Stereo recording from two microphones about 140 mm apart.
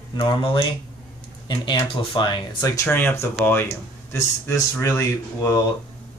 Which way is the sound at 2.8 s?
15° left (ahead or behind).